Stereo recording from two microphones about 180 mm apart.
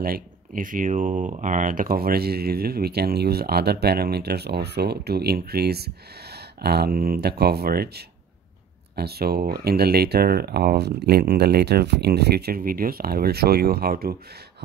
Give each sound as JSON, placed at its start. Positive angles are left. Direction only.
{"t": 0.0, "sound": "speech", "side_deg": -55}